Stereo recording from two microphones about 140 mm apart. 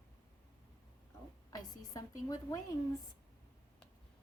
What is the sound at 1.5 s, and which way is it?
A woman's voice, 25° left (ahead or behind).